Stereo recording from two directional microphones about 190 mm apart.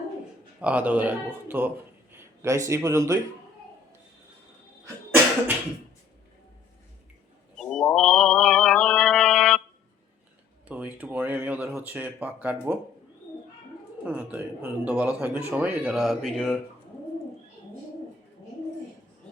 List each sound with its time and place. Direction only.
0.6 s a man's voice: 5° right (ahead or behind)
7.6 s music: 5° left (ahead or behind)
10.7 s speech: 5° right (ahead or behind)
14.0 s speech: 5° right (ahead or behind)